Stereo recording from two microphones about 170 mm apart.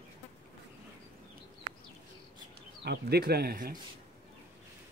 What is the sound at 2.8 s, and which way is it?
Speech, 70° right (ahead or behind).